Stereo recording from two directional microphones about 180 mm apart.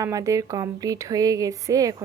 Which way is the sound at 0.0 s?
15° right (ahead or behind).